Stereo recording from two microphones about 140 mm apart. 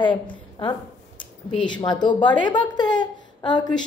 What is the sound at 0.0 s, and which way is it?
A woman's voice, 35° left (ahead or behind).